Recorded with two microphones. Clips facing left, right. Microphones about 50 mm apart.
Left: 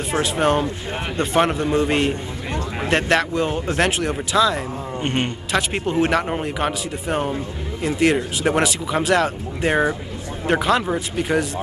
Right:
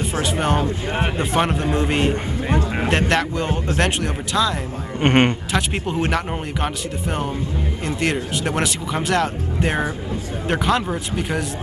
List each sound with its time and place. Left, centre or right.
0.1 s speech: centre
5.0 s speech: right
5.5 s speech: centre